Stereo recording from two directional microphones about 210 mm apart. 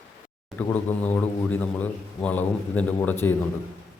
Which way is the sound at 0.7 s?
5° left (ahead or behind).